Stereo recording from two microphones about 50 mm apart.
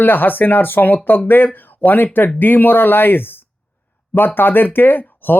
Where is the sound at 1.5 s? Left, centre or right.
Left.